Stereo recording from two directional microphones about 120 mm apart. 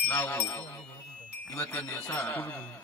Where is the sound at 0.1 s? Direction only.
20° left (ahead or behind).